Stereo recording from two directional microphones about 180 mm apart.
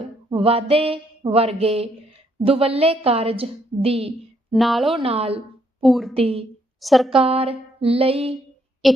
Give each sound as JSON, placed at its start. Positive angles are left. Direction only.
{"t": 0.3, "sound": "a woman's voice", "side_deg": -30}
{"t": 4.5, "sound": "a woman's voice", "side_deg": 0}
{"t": 4.9, "sound": "a woman's voice", "side_deg": -30}
{"t": 5.8, "sound": "a woman's voice", "side_deg": 0}
{"t": 6.1, "sound": "a woman's voice", "side_deg": -35}
{"t": 6.8, "sound": "a woman's voice", "side_deg": 0}
{"t": 7.1, "sound": "a woman's voice", "side_deg": -35}
{"t": 8.8, "sound": "a woman's voice", "side_deg": 0}